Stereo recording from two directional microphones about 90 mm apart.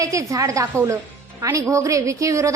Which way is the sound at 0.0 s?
35° right (ahead or behind).